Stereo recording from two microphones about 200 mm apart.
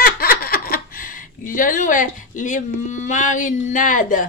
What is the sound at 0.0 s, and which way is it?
Speech, 50° left (ahead or behind).